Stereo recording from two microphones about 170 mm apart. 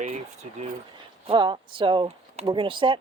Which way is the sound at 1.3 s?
30° right (ahead or behind).